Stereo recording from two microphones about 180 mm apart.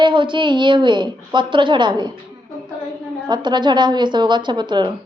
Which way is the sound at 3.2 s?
25° right (ahead or behind).